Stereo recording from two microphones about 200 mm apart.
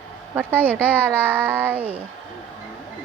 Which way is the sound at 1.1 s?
10° right (ahead or behind).